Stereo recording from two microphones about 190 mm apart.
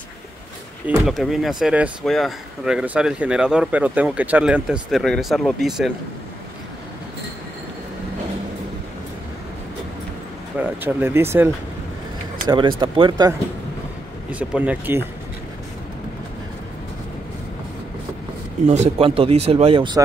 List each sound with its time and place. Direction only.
0.8 s speech: 5° right (ahead or behind)
10.6 s speech: 10° right (ahead or behind)
12.4 s speech: 25° right (ahead or behind)
14.3 s speech: 5° right (ahead or behind)
18.7 s speech: 35° right (ahead or behind)